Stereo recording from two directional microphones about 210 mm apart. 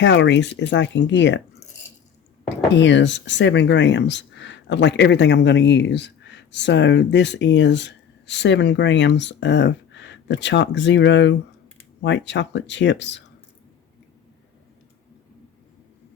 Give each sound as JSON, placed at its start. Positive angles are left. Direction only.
{"t": 0.0, "sound": "speech", "side_deg": 60}
{"t": 2.7, "sound": "speech", "side_deg": 60}